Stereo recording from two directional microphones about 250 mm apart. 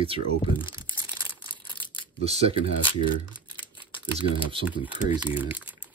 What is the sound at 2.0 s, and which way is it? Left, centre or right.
Camera, right.